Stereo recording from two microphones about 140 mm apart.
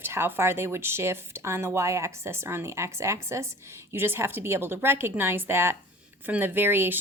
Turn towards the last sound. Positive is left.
turn(degrees=-15)  # may be behind; listen again after turning